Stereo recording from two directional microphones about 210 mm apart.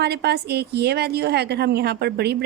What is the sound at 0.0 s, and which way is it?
A woman's voice, 50° right (ahead or behind).